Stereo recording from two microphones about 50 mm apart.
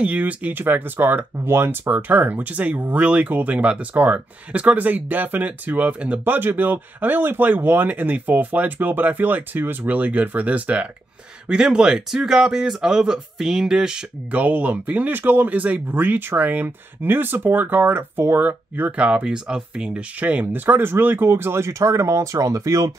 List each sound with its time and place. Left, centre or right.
0.0 s speech: right
0.6 s speech: right
1.9 s speech: right
3.3 s speech: right
3.5 s speech: right
6.2 s speech: right
11.4 s speech: centre
14.3 s speech: right
18.4 s speech: right
20.6 s speech: right